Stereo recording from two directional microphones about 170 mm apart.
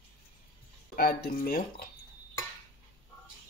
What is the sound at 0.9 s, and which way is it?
Speech, 65° left (ahead or behind).